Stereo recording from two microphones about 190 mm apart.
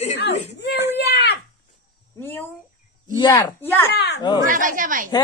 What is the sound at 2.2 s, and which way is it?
A woman's voice, 10° left (ahead or behind).